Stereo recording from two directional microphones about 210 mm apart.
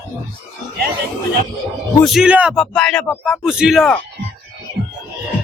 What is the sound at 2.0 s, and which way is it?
Speech, centre (ahead or behind).